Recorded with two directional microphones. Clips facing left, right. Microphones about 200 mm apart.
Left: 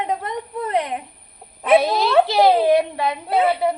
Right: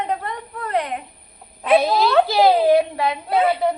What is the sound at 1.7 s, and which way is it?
Speech, centre (ahead or behind).